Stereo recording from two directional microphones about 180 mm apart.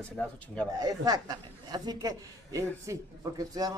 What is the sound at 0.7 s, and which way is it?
Speech, 20° right (ahead or behind).